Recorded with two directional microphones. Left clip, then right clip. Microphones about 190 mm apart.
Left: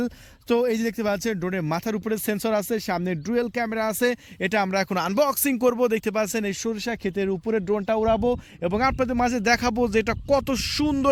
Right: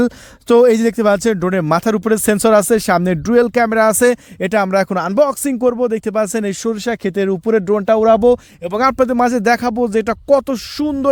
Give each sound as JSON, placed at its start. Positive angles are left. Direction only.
{"t": 0.0, "sound": "speech", "side_deg": -65}